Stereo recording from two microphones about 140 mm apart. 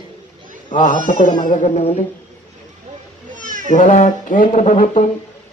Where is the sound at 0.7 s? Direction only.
65° left (ahead or behind).